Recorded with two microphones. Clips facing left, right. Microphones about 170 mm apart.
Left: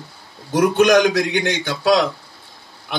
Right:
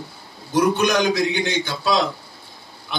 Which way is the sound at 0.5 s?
90° left.